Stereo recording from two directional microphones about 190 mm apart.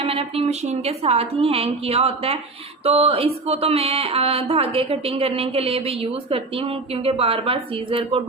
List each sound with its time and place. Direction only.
0.0 s speech: 30° right (ahead or behind)